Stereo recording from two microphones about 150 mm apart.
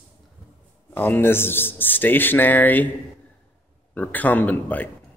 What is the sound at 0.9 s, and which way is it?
Speech, 15° left (ahead or behind).